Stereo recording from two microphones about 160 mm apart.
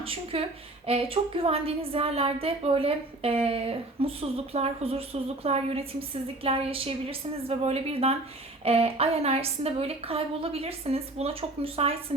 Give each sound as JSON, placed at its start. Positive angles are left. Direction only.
{"t": 0.0, "sound": "a woman's voice", "side_deg": -35}